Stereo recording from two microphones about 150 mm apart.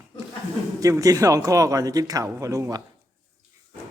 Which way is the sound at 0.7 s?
20° right (ahead or behind).